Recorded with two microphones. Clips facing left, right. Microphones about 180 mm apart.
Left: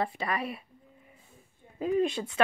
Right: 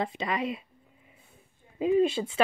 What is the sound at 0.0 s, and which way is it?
Speech, 20° right (ahead or behind).